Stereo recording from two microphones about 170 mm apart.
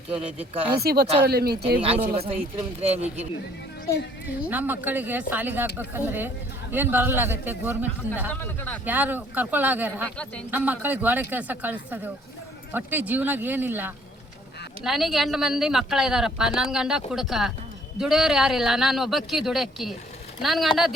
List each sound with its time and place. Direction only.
0.1 s speech: 5° right (ahead or behind)
0.8 s speech: 70° right (ahead or behind)
1.8 s speech: 35° right (ahead or behind)
4.4 s speech: 10° right (ahead or behind)
8.3 s speech: 10° left (ahead or behind)
8.8 s speech: 10° right (ahead or behind)
14.8 s speech: centre (ahead or behind)